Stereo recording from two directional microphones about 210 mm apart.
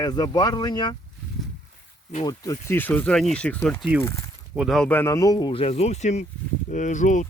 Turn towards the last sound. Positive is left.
turn(degrees=35)  # may be behind; listen again after turning